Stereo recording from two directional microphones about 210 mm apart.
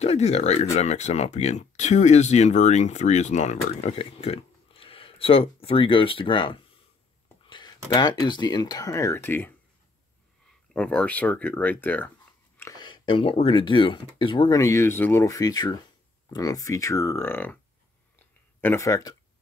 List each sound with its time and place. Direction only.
0.0 s speech: 30° left (ahead or behind)
7.4 s a sound: 20° left (ahead or behind)
7.9 s speech: 20° left (ahead or behind)
10.7 s speech: 5° left (ahead or behind)
18.6 s speech: 10° left (ahead or behind)